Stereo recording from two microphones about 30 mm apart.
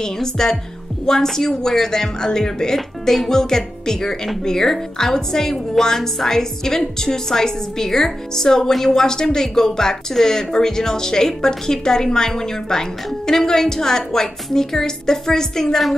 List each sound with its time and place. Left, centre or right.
0.0 s speech: centre